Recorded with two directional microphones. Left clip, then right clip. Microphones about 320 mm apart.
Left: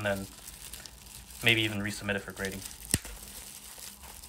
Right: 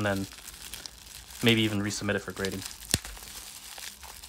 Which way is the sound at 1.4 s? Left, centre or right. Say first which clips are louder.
Right 1 dB; centre.